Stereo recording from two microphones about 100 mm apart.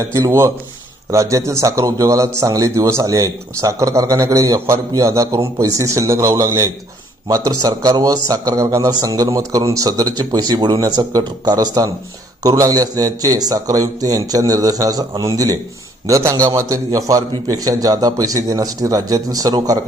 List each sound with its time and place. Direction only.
0.0 s a man's voice: 30° right (ahead or behind)